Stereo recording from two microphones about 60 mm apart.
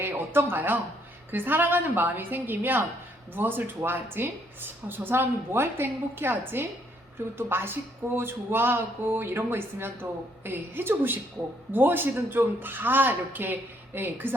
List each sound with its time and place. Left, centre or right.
0.0 s speech: right